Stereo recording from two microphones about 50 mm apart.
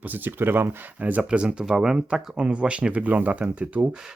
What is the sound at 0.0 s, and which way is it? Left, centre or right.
Speech, right.